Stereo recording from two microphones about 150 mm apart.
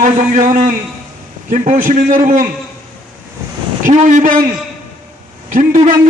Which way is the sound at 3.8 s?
60° right (ahead or behind).